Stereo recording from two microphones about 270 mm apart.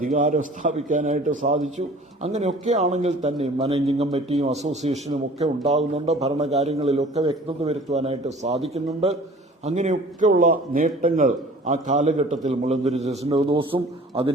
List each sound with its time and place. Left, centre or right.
0.0 s a man's voice: right